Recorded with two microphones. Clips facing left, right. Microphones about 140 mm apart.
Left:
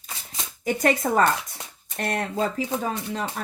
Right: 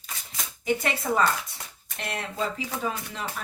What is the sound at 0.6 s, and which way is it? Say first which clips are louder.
Speech: left 4 dB; 45° left (ahead or behind).